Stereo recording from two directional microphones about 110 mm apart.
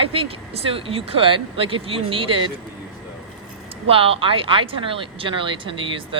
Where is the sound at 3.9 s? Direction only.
55° right (ahead or behind).